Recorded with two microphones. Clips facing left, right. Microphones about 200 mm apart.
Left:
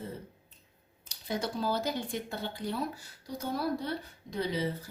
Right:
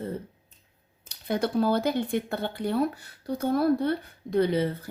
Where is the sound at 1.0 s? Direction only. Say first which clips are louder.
Right 7 dB; 60° right (ahead or behind).